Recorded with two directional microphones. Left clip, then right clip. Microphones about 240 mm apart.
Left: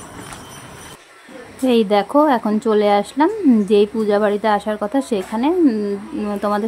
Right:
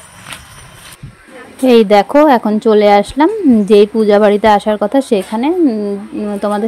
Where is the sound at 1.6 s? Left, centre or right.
Right.